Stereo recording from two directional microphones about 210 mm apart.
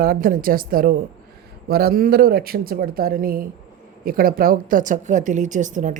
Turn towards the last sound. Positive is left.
turn(degrees=-35)  # may be behind; listen again after turning